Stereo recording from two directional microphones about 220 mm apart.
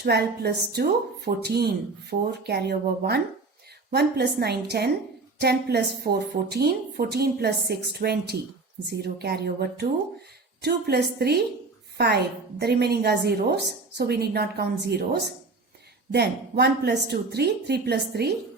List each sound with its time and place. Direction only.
0.0 s a woman's voice: 45° right (ahead or behind)